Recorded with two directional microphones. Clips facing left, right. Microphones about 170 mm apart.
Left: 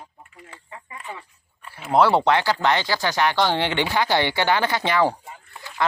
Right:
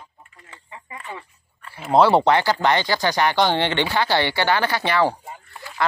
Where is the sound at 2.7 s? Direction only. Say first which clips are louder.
Right 2 dB; 5° left (ahead or behind).